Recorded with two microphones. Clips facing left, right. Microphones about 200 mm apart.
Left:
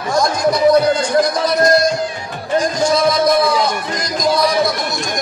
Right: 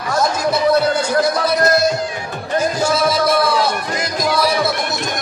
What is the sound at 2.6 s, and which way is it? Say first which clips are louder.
Music: left 1 dB; 5° right (ahead or behind).